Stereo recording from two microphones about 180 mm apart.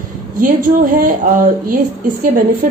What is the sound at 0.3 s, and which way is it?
A woman's voice, 50° right (ahead or behind).